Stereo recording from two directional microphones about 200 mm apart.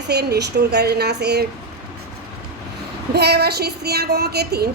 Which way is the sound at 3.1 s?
55° right (ahead or behind).